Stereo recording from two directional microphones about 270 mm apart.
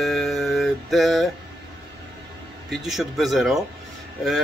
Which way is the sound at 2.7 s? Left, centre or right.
Centre.